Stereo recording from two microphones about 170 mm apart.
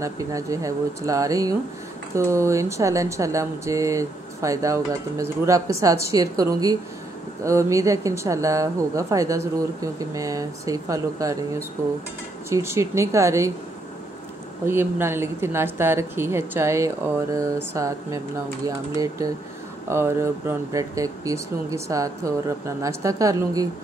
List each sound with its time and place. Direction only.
0.0 s a woman's voice: 20° right (ahead or behind)
14.7 s a woman's voice: 15° right (ahead or behind)